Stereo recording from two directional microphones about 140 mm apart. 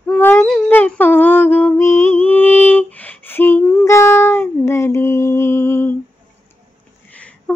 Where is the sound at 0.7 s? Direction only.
15° left (ahead or behind).